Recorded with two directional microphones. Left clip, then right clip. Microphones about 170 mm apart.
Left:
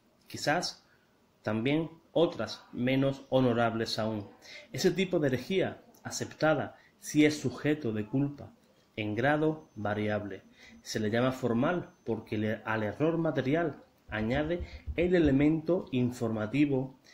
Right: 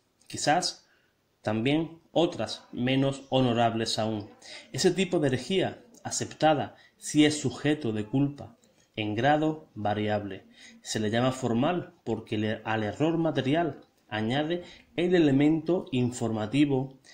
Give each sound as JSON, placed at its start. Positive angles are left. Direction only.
{"t": 0.3, "sound": "speech", "side_deg": -20}